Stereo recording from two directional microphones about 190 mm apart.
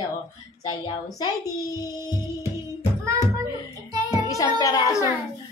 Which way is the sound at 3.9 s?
20° right (ahead or behind).